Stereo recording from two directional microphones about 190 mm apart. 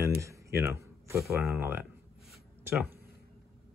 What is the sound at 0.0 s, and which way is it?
Speech, 15° right (ahead or behind).